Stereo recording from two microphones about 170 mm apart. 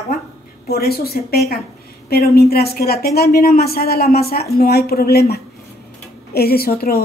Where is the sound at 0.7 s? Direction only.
65° left (ahead or behind).